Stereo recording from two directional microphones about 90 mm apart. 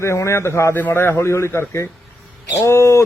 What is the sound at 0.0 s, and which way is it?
A man's voice, 30° left (ahead or behind).